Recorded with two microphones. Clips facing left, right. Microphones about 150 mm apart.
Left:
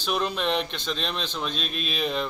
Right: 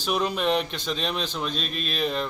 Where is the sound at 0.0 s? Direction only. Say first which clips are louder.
Right 2 dB; 5° right (ahead or behind).